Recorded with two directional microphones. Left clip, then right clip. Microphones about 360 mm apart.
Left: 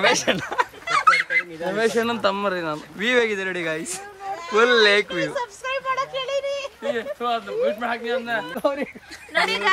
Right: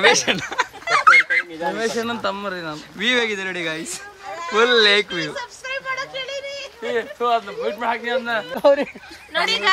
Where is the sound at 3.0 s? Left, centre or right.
Centre.